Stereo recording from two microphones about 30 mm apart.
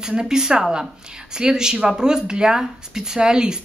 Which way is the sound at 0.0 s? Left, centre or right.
Right.